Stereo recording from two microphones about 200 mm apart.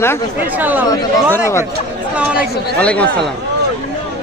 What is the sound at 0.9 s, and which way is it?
Speech, 15° left (ahead or behind).